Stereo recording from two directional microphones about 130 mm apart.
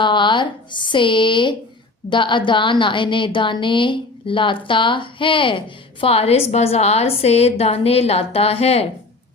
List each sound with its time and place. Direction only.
0.0 s a woman's voice: 40° left (ahead or behind)